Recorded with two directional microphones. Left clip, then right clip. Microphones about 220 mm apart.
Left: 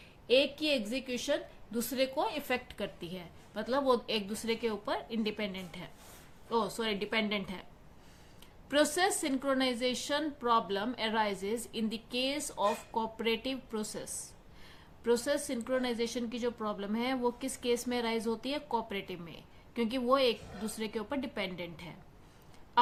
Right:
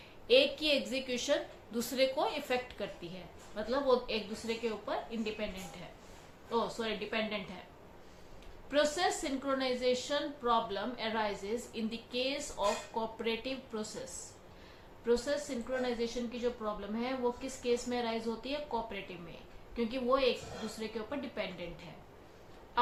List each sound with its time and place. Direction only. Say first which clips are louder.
0.3 s a woman's voice: right 1 dB; 30° left (ahead or behind)
6.5 s a woman's voice: left 2 dB; 35° left (ahead or behind)
8.7 s a woman's voice: left 2 dB; 35° left (ahead or behind)